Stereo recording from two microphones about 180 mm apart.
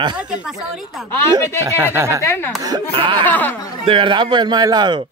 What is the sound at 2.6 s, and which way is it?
Speech, 25° right (ahead or behind).